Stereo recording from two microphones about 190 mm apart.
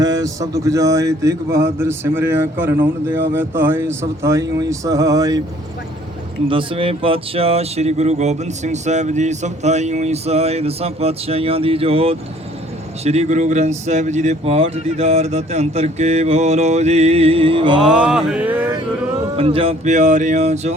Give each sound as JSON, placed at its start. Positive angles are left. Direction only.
{"t": 0.0, "sound": "speech", "side_deg": -20}
{"t": 6.5, "sound": "speech", "side_deg": -25}
{"t": 17.8, "sound": "mantra", "side_deg": -5}
{"t": 19.4, "sound": "speech", "side_deg": -30}